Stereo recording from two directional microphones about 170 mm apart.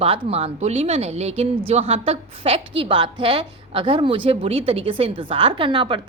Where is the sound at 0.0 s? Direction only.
35° right (ahead or behind).